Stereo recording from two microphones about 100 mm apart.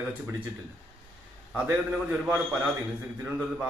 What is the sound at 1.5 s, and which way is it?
A man's voice, 20° right (ahead or behind).